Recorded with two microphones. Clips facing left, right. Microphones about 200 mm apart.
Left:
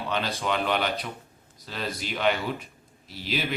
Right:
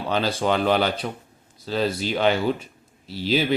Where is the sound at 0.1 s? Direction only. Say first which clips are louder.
Right 7 dB; 30° right (ahead or behind).